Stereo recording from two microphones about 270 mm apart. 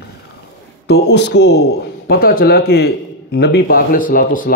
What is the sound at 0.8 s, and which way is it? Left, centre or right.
A man's voice, left.